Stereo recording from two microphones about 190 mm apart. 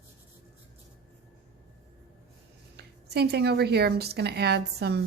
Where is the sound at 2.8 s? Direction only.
60° right (ahead or behind).